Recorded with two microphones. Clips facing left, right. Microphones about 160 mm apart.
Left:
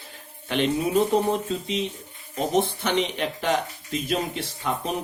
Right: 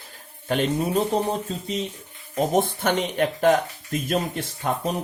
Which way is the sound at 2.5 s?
50° right (ahead or behind).